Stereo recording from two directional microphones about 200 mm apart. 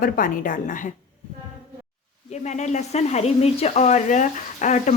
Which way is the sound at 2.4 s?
35° left (ahead or behind).